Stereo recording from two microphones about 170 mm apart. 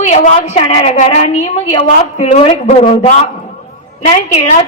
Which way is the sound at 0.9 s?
45° left (ahead or behind).